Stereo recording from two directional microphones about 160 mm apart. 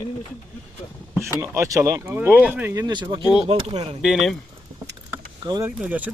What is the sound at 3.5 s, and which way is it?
Speech, 40° right (ahead or behind).